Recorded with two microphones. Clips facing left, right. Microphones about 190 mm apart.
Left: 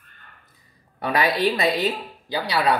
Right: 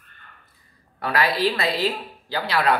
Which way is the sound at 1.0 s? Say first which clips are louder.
Left 1 dB; 20° left (ahead or behind).